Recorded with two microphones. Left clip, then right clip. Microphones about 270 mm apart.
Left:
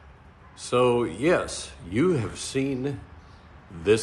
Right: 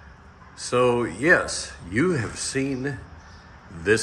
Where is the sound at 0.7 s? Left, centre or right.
Centre.